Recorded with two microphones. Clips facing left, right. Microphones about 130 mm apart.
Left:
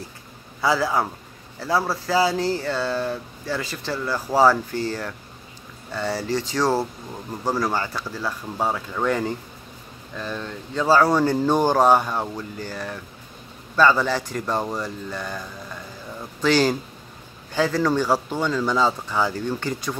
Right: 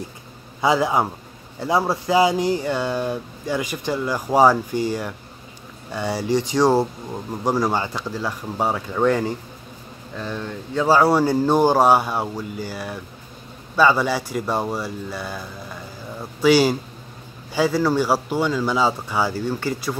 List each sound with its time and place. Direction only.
0.6 s a man's voice: 20° right (ahead or behind)